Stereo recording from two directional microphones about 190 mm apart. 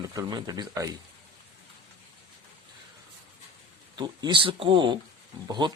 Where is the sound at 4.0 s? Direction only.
25° right (ahead or behind).